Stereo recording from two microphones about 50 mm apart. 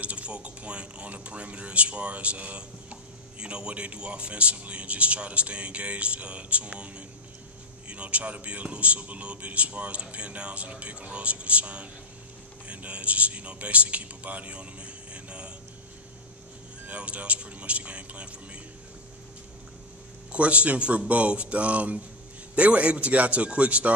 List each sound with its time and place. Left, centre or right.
0.0 s speech: right
16.8 s speech: right
20.3 s speech: right